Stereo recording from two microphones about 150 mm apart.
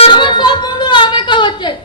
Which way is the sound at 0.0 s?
30° left (ahead or behind).